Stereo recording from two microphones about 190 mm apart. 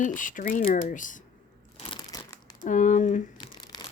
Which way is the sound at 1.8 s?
25° left (ahead or behind).